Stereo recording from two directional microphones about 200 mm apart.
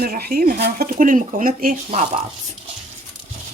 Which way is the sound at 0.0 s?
50° right (ahead or behind).